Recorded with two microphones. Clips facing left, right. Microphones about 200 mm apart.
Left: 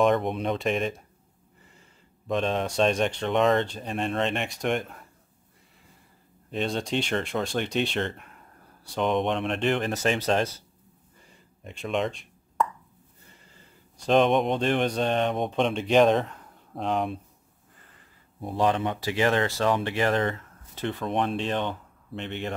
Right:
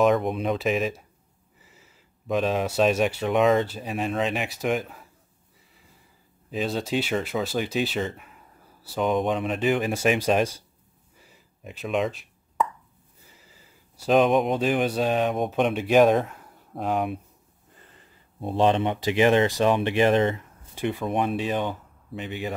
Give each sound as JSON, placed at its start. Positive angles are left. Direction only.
{"t": 0.0, "sound": "speech", "side_deg": 0}
{"t": 6.5, "sound": "speech", "side_deg": -5}
{"t": 11.1, "sound": "plop", "side_deg": -5}
{"t": 13.2, "sound": "speech", "side_deg": -5}
{"t": 17.7, "sound": "speech", "side_deg": -25}